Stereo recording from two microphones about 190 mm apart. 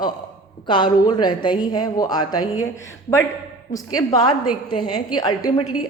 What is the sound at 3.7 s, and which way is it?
A woman's voice, 20° left (ahead or behind).